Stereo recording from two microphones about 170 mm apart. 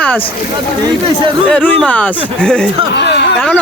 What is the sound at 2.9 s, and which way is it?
Speech, 80° left.